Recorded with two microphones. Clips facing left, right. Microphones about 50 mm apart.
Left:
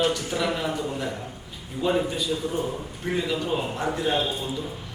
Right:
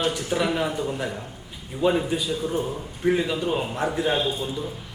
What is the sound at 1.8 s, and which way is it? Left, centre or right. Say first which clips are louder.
A man's voice: right 2 dB; centre.